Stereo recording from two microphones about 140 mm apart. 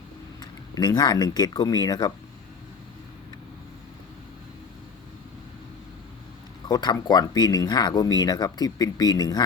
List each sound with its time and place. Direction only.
0.8 s speech: 30° left (ahead or behind)
6.7 s speech: 30° left (ahead or behind)